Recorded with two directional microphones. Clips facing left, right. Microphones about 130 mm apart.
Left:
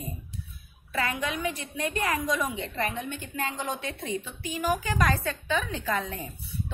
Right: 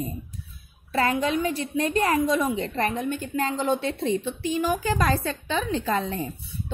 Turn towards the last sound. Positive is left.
turn(degrees=-30)  # may be behind; listen again after turning